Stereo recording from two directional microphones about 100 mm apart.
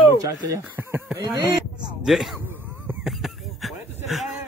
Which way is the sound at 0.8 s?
25° right (ahead or behind).